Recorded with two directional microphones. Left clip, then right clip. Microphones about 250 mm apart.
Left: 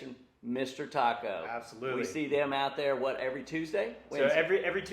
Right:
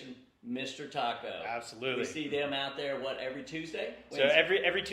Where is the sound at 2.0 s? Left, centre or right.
Left.